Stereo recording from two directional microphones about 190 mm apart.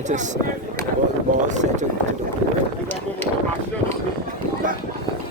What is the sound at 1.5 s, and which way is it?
Speech, 40° right (ahead or behind).